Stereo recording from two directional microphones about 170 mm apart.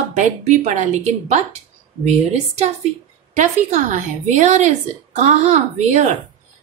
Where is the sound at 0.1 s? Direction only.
45° right (ahead or behind).